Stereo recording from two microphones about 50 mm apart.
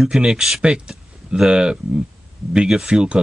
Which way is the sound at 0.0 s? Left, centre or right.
Centre.